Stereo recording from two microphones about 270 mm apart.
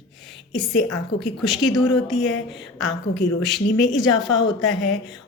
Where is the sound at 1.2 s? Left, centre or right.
Centre.